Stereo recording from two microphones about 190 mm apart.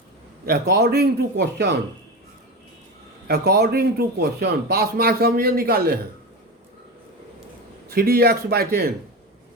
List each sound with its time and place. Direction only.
0.4 s a man's voice: 55° right (ahead or behind)
3.2 s a man's voice: 55° right (ahead or behind)
7.9 s a man's voice: 50° right (ahead or behind)